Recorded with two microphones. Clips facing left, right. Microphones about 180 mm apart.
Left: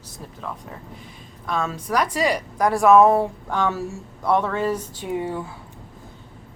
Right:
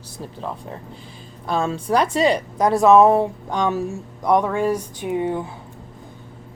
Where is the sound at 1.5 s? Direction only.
30° right (ahead or behind).